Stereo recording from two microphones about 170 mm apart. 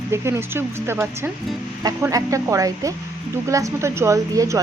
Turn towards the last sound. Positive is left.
turn(degrees=-20)  # may be behind; listen again after turning